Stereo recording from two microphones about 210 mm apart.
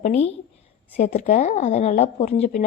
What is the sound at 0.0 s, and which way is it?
A woman's voice, 30° left (ahead or behind).